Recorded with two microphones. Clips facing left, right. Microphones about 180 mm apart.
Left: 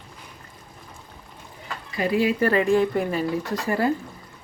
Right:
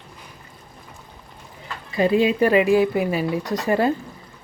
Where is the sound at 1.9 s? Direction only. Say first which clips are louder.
Right 4 dB; 25° right (ahead or behind).